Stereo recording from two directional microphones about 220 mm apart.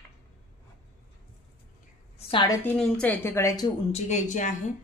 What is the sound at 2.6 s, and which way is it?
A woman's voice, 5° left (ahead or behind).